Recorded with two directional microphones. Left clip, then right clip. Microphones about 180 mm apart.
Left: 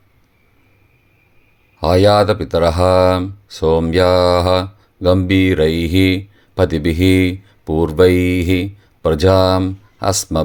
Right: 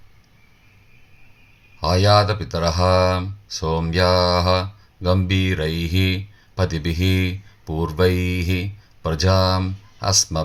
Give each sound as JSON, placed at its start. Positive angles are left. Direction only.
{"t": 1.8, "sound": "speech", "side_deg": 45}